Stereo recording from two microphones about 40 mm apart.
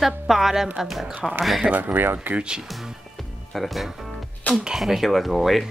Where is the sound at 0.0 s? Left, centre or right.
Centre.